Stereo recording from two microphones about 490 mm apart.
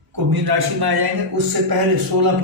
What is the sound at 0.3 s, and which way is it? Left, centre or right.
Speech, right.